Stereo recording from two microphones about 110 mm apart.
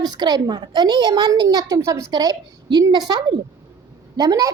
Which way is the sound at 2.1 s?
35° right (ahead or behind).